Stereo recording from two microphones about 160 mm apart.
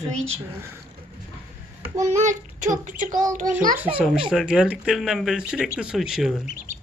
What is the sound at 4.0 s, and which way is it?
Speech, 5° right (ahead or behind).